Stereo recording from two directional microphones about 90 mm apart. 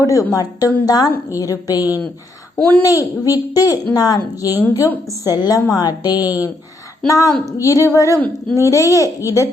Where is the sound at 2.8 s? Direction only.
40° left (ahead or behind).